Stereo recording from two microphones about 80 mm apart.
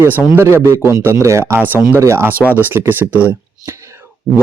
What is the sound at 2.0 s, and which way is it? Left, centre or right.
Speech, right.